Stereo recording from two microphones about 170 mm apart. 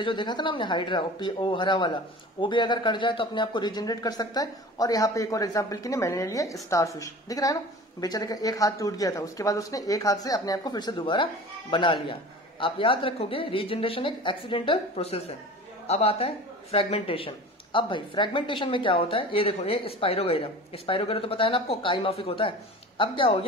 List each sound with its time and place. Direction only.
0.0 s a woman's voice: 25° left (ahead or behind)